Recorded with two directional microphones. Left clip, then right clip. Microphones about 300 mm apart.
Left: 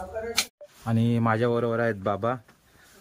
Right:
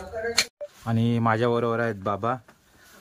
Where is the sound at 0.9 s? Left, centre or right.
Centre.